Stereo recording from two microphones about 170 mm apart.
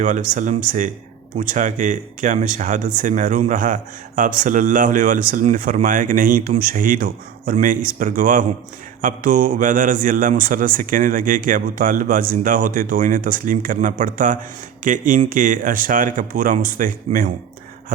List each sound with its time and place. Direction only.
0.0 s a man's voice: 50° right (ahead or behind)